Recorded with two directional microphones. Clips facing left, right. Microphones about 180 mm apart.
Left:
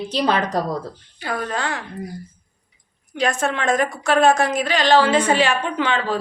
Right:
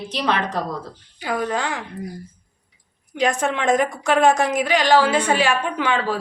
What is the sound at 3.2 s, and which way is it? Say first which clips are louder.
A woman's voice: right 1 dB; 15° right (ahead or behind).